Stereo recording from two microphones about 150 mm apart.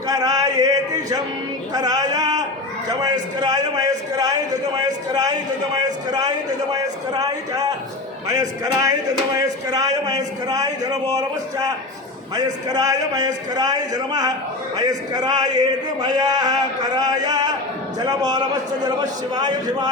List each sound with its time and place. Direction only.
0.1 s a sound: 25° right (ahead or behind)
1.7 s speech: 25° right (ahead or behind)
5.7 s speech: 25° right (ahead or behind)